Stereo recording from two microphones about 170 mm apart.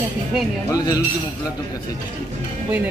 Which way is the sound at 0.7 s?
20° left (ahead or behind).